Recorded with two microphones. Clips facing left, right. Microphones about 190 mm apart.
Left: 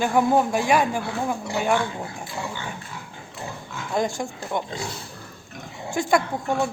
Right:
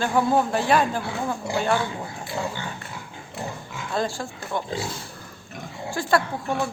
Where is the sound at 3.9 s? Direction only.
15° left (ahead or behind).